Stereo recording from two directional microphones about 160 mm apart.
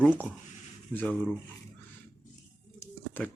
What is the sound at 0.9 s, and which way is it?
Speech, 10° left (ahead or behind).